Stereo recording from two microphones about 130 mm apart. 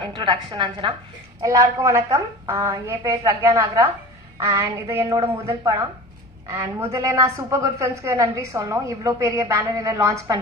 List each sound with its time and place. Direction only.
0.0 s a woman's voice: 35° right (ahead or behind)
1.4 s a woman's voice: 25° right (ahead or behind)